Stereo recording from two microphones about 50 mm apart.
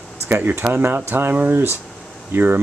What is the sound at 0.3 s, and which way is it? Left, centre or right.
Speech, right.